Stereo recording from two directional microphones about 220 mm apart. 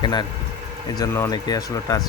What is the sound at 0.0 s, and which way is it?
Speech, 20° left (ahead or behind).